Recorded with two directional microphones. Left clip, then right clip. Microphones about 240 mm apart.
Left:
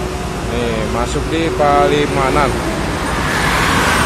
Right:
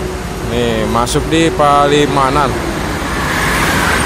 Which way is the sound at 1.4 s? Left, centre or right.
Centre.